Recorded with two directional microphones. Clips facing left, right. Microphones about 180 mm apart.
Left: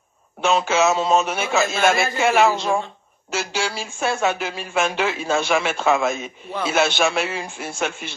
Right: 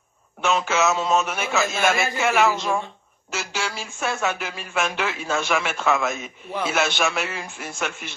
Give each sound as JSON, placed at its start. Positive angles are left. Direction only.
{"t": 0.4, "sound": "a man's voice", "side_deg": 30}